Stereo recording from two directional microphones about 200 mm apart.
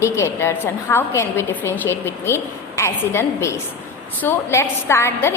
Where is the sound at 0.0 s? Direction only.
15° left (ahead or behind).